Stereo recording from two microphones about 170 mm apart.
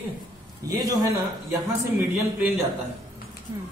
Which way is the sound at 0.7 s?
20° right (ahead or behind).